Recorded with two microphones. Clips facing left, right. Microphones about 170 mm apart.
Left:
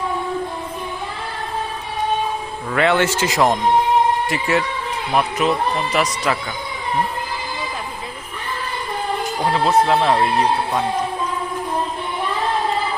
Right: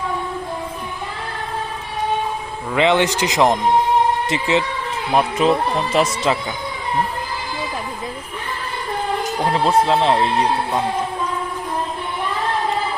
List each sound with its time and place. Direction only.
2.7 s speech: 20° right (ahead or behind)
9.8 s speech: 25° right (ahead or behind)